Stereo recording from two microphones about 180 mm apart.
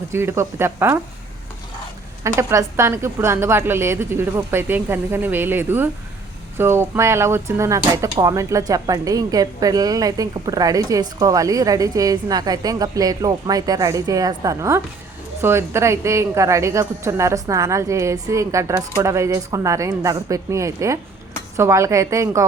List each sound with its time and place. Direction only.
0.1 s a woman's voice: 15° right (ahead or behind)
2.2 s a woman's voice: 15° right (ahead or behind)